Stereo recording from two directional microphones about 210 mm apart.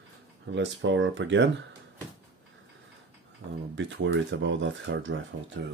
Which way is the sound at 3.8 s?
60° right (ahead or behind).